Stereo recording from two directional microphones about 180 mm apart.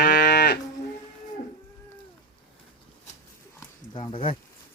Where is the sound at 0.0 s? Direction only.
60° left (ahead or behind).